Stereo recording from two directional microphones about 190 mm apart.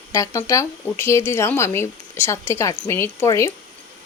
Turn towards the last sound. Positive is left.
turn(degrees=15)  # may be behind; listen again after turning